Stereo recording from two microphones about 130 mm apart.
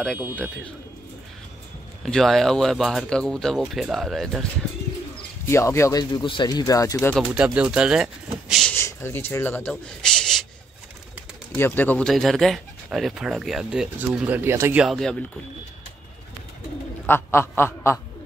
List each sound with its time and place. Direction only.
2.0 s speech: 5° left (ahead or behind)
5.4 s speech: 20° left (ahead or behind)
7.1 s speech: 5° left (ahead or behind)
7.3 s speech: 10° right (ahead or behind)
8.7 s speech: 20° left (ahead or behind)
11.5 s speech: 15° left (ahead or behind)
12.1 s speech: centre (ahead or behind); by 14.8 s 20° right (ahead or behind)
14.8 s speech: centre (ahead or behind)
17.0 s speech: 15° left (ahead or behind)